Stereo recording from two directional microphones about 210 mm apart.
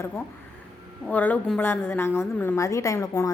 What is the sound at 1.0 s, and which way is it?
A woman's voice, 10° left (ahead or behind).